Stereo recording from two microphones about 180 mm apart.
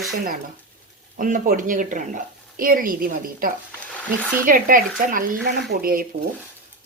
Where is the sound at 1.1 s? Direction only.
50° right (ahead or behind).